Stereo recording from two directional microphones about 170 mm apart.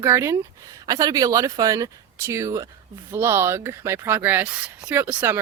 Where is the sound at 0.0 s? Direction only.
15° right (ahead or behind).